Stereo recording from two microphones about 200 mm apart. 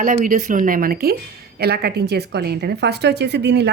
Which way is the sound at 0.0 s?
40° right (ahead or behind).